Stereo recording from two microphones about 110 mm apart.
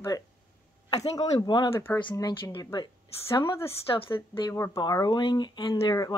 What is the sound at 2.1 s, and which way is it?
Speech, 35° left (ahead or behind).